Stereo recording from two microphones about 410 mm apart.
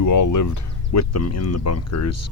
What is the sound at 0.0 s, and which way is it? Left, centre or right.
Speech, left.